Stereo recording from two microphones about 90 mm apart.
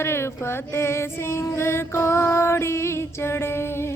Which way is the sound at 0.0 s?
30° left (ahead or behind).